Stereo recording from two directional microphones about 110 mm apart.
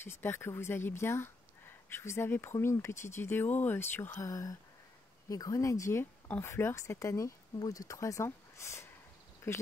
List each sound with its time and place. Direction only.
0.0 s speech: 20° left (ahead or behind)
4.3 s speech: 30° left (ahead or behind)